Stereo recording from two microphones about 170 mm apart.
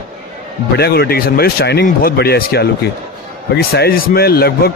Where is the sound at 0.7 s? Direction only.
70° left (ahead or behind).